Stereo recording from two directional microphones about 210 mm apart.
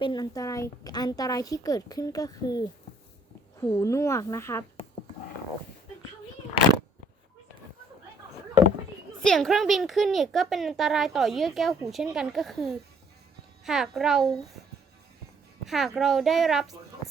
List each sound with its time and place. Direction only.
0.0 s a woman's voice: 20° left (ahead or behind)
9.2 s speech: centre (ahead or behind)
15.6 s speech: centre (ahead or behind)